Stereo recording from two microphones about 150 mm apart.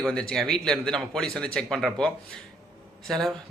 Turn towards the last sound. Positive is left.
turn(degrees=0)  # may be behind; listen again after turning